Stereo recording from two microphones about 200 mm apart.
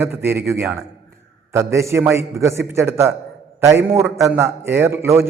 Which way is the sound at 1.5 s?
15° right (ahead or behind).